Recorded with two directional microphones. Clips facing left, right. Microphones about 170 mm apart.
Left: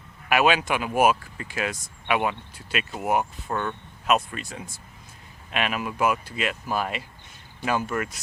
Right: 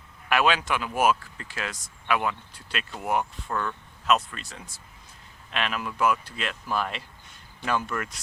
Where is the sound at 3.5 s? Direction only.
20° left (ahead or behind).